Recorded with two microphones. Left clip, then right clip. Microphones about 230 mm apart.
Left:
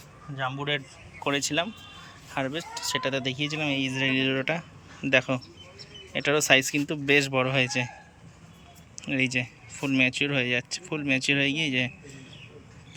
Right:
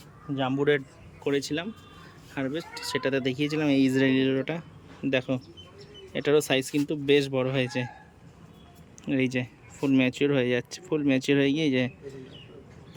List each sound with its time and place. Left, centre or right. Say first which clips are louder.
0.3 s a man's voice: right 4 dB; right
1.2 s speech: left 2 dB; centre
9.0 s speech: left 1 dB; centre